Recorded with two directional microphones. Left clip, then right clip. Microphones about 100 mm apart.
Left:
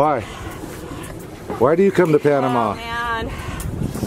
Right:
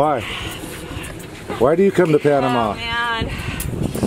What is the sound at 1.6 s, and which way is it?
Speech, 15° right (ahead or behind).